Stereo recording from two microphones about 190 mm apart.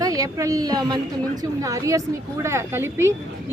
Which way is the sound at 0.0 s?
20° right (ahead or behind).